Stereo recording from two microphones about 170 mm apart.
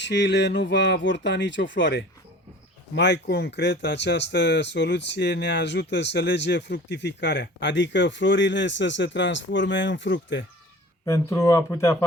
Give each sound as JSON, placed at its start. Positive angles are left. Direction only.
{"t": 0.0, "sound": "speech", "side_deg": 90}
{"t": 11.0, "sound": "speech", "side_deg": 15}